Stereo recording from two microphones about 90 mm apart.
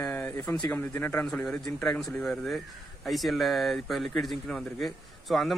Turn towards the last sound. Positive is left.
turn(degrees=0)  # may be behind; listen again after turning